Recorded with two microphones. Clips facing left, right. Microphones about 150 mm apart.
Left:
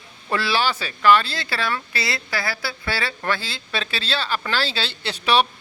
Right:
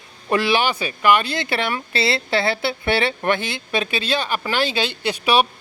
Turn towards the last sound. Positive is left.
turn(degrees=-10)  # may be behind; listen again after turning